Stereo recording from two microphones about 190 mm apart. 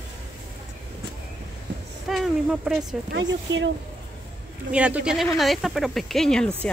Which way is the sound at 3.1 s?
70° right (ahead or behind).